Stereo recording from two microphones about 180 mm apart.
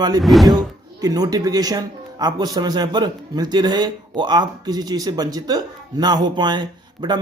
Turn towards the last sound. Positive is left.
turn(degrees=-25)  # may be behind; listen again after turning